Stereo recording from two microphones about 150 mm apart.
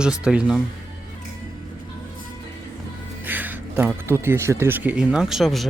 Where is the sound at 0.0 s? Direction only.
5° right (ahead or behind).